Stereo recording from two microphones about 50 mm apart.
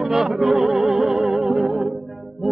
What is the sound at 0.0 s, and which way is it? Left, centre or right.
Music, centre.